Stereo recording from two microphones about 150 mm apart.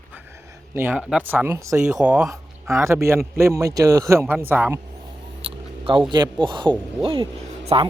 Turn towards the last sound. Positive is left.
turn(degrees=-35)  # may be behind; listen again after turning